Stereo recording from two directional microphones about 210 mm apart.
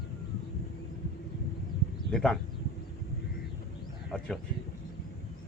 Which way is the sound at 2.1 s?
5° left (ahead or behind).